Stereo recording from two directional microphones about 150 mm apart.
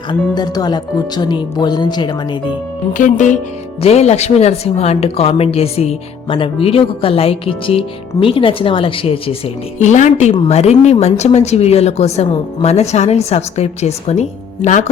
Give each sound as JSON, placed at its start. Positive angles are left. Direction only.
{"t": 0.1, "sound": "speech", "side_deg": 25}
{"t": 3.0, "sound": "speech", "side_deg": 55}
{"t": 3.8, "sound": "speech", "side_deg": 45}
{"t": 9.7, "sound": "a woman's voice", "side_deg": 55}